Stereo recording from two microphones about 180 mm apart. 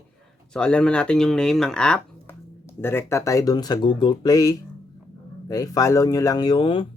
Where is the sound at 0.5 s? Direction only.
5° left (ahead or behind).